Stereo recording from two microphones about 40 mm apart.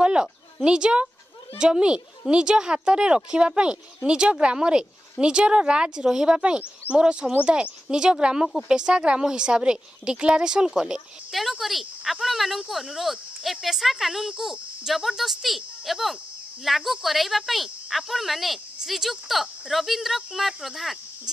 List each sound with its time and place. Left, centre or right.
0.0 s a sound: right
1.6 s a woman's voice: right
11.3 s speech: centre